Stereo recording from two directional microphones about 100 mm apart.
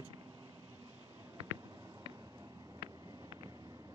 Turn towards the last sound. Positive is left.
turn(degrees=-40)  # may be behind; listen again after turning